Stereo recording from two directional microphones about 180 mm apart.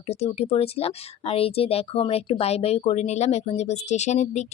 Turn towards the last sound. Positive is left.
turn(degrees=40)  # may be behind; listen again after turning